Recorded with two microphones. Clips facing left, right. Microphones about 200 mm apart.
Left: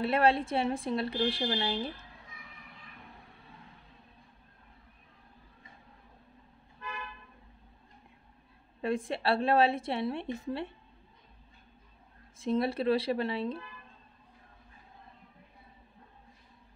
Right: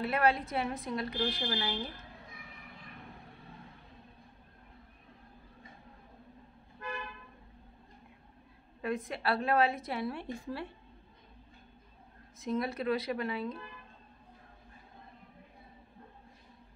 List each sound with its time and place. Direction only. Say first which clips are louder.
0.0 s a woman's voice: left 3 dB; 30° left (ahead or behind)
8.8 s a woman's voice: left 3 dB; 30° left (ahead or behind)
12.4 s a woman's voice: left 4 dB; 30° left (ahead or behind)